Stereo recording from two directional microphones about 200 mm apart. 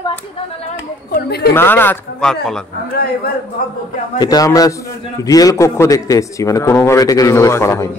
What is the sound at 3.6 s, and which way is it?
Speech, 45° left (ahead or behind).